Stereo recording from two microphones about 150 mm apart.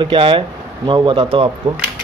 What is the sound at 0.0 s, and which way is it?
Speech, 35° right (ahead or behind).